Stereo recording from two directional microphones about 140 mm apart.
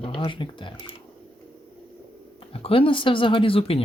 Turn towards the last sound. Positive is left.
turn(degrees=40)  # may be behind; listen again after turning